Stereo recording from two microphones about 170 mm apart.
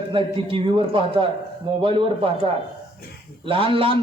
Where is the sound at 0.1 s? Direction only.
30° right (ahead or behind).